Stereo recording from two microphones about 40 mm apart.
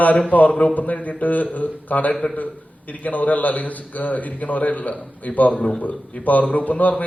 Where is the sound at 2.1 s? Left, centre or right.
Centre.